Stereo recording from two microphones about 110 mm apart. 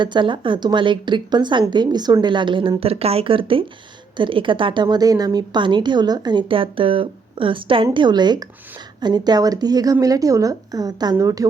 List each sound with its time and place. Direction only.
0.0 s a woman's voice: 45° right (ahead or behind)